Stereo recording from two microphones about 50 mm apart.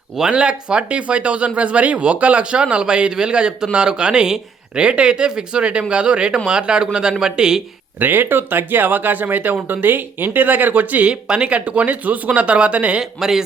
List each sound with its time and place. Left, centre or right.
0.2 s speech: centre
7.9 s speech: right
11.1 s speech: centre
13.0 s speech: centre